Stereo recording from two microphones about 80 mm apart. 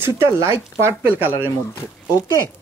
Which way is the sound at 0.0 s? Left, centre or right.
Right.